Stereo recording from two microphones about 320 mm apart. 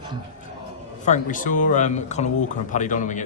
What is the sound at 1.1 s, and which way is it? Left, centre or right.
Speech, left.